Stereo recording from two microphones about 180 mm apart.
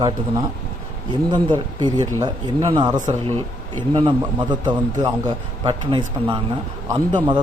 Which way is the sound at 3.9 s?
25° right (ahead or behind).